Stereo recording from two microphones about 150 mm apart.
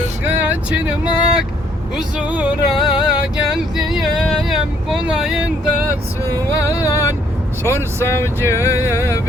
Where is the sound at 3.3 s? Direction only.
5° right (ahead or behind).